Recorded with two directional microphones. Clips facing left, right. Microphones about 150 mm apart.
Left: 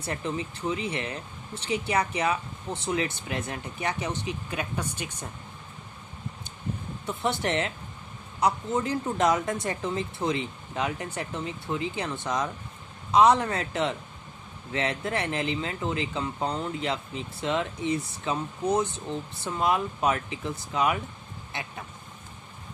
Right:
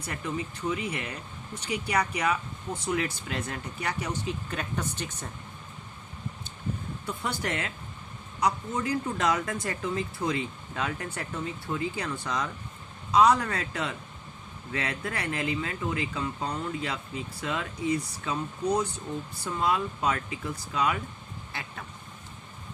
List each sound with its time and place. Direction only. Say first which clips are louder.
0.0 s speech: left 2 dB; 25° left (ahead or behind); by 5.1 s 10° left (ahead or behind)
7.1 s speech: left 5 dB; 25° left (ahead or behind)
21.5 s vehicle: left 3 dB; 20° left (ahead or behind)